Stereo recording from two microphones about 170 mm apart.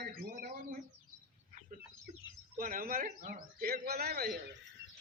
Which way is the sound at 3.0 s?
55° right (ahead or behind).